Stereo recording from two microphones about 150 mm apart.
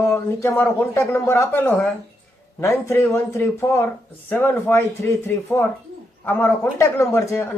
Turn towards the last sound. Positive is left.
turn(degrees=15)  # may be behind; listen again after turning